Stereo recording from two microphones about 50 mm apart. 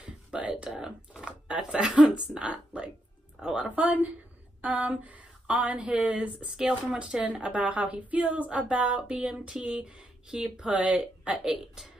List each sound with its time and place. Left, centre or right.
0.0 s whispering: right
1.2 s speech: centre
3.3 s speech: centre
3.7 s speech: right; by 10.7 s centre
10.7 s speech: right
11.4 s speech: centre